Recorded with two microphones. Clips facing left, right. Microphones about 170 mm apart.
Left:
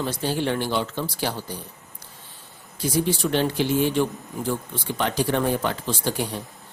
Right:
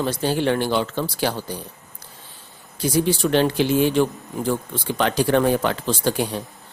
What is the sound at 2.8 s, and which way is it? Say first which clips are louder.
Speech: right 3 dB; 90° right.